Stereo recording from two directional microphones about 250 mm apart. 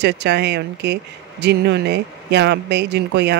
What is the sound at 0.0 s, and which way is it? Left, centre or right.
Speech, right.